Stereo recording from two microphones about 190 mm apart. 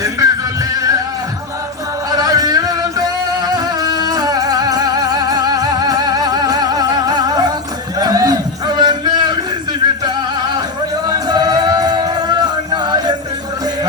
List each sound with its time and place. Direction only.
0.0 s music: 20° right (ahead or behind)
2.0 s music: 20° right (ahead or behind)
7.9 s a sound: 20° right (ahead or behind)
11.0 s music: 20° right (ahead or behind)